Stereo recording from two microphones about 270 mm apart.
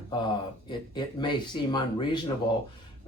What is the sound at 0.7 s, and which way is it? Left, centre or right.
Speech, centre.